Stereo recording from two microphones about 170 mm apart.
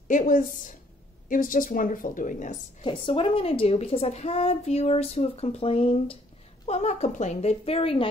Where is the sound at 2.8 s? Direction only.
30° left (ahead or behind).